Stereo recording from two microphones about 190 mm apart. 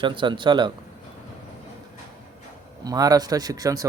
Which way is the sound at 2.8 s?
20° right (ahead or behind).